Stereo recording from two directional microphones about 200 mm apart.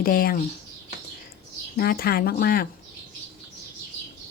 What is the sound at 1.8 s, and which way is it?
Speech, 50° left (ahead or behind).